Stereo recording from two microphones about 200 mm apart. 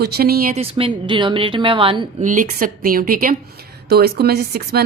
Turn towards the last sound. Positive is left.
turn(degrees=-50)  # may be behind; listen again after turning